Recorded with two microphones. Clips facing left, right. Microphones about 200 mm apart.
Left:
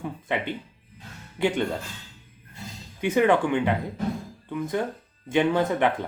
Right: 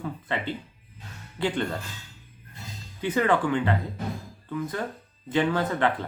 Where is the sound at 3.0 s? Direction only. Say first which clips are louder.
Left 3 dB; 10° left (ahead or behind).